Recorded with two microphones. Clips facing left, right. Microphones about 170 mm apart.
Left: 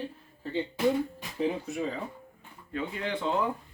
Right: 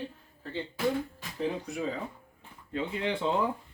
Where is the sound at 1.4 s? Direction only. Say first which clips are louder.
Left 2 dB; centre (ahead or behind).